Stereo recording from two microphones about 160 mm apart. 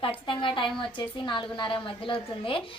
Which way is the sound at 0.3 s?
30° left (ahead or behind).